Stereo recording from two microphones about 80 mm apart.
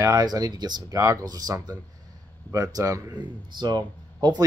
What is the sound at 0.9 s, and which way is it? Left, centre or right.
Speech, right.